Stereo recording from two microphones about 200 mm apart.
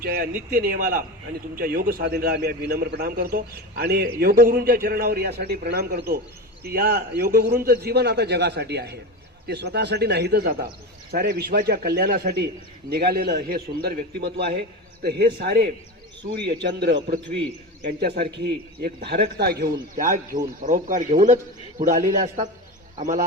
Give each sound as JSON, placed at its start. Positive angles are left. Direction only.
{"t": 0.0, "sound": "a man's voice", "side_deg": -45}